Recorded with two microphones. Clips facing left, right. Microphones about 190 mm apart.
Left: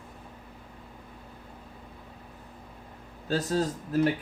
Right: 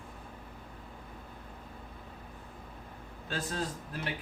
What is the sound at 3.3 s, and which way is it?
Speech, 40° left (ahead or behind).